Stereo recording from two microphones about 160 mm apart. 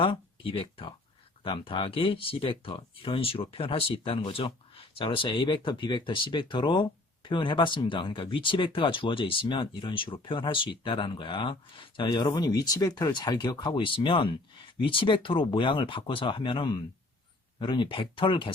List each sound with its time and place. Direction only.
0.0 s speech: 35° left (ahead or behind)